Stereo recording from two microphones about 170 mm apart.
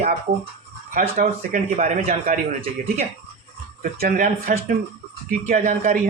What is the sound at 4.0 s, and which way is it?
Speech, 60° right (ahead or behind).